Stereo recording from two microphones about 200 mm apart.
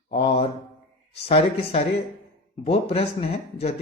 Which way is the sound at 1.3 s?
30° left (ahead or behind).